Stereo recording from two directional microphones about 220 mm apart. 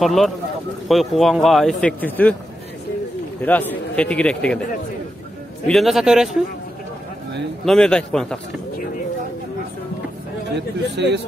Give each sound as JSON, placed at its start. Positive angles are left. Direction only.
{"t": 0.0, "sound": "speech", "side_deg": 0}
{"t": 3.3, "sound": "speech", "side_deg": 10}
{"t": 5.7, "sound": "speech", "side_deg": 0}
{"t": 7.6, "sound": "speech", "side_deg": 5}
{"t": 11.0, "sound": "speech", "side_deg": -50}